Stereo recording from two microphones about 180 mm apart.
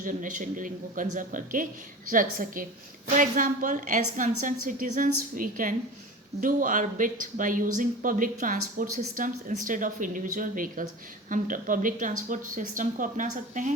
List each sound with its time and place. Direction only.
0.0 s speech: 45° right (ahead or behind)